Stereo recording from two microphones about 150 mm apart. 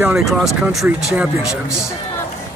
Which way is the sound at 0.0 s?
5° right (ahead or behind).